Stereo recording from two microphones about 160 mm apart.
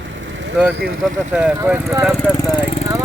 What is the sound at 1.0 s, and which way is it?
Speech, 5° right (ahead or behind).